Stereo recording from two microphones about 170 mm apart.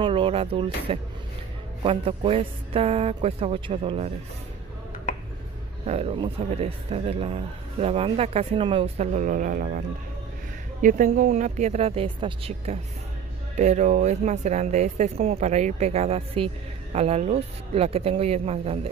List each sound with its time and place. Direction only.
0.0 s speech: 30° right (ahead or behind)
5.9 s speech: 35° right (ahead or behind)
13.6 s speech: 45° right (ahead or behind)